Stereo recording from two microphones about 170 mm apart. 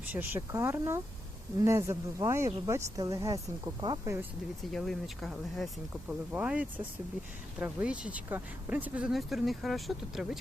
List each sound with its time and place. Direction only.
0.1 s speech: 15° right (ahead or behind)
4.7 s speech: centre (ahead or behind)